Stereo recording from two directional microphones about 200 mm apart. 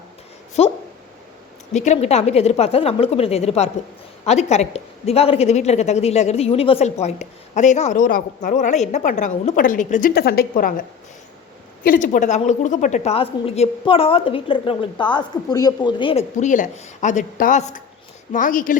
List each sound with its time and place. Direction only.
0.6 s a woman's voice: 35° left (ahead or behind)